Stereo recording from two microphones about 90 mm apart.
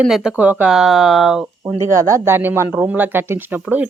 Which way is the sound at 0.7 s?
5° right (ahead or behind).